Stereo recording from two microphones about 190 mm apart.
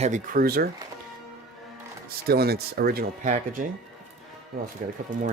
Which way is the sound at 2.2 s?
55° right (ahead or behind).